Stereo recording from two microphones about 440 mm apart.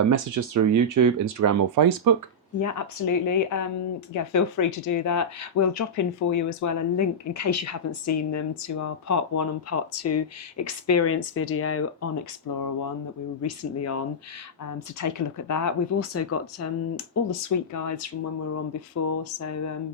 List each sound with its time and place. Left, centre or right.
0.0 s speech: right
2.6 s speech: left
12.5 s speech: left
13.4 s speech: left
15.0 s speech: left